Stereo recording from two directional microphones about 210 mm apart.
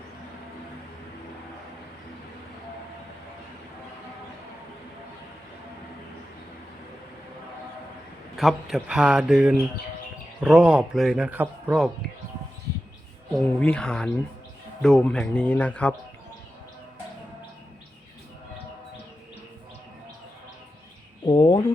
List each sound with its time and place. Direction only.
8.4 s speech: centre (ahead or behind)
13.3 s speech: 5° left (ahead or behind)
21.2 s speech: 20° left (ahead or behind)